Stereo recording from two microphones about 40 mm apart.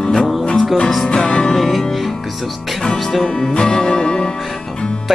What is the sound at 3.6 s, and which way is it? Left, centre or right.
Music, centre.